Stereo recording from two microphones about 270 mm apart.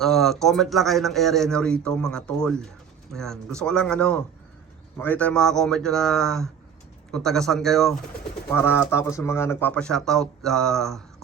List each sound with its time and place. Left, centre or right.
0.0 s speech: centre